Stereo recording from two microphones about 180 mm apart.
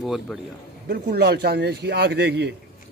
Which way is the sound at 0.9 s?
65° right (ahead or behind).